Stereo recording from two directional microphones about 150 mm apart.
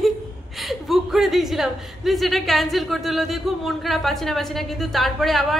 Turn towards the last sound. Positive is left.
turn(degrees=0)  # may be behind; listen again after turning